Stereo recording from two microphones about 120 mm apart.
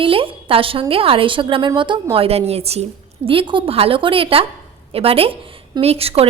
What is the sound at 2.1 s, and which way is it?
A woman's voice, 55° right (ahead or behind).